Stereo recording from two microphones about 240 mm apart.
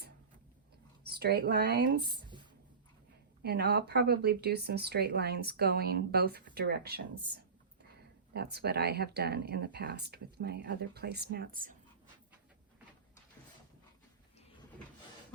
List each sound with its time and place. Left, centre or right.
1.0 s speech: right
3.4 s speech: right
8.3 s speech: right